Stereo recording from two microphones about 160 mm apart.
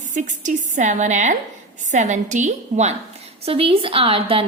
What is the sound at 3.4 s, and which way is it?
A woman's voice, 35° right (ahead or behind).